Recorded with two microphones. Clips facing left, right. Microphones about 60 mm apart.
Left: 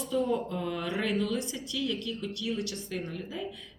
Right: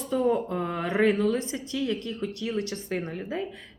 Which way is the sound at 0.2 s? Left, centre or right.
Right.